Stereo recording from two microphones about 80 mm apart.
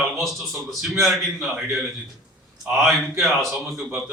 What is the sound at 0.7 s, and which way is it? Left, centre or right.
Speech, centre.